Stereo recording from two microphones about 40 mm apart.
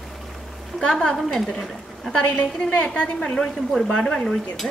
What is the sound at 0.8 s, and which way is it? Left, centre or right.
Speech, centre.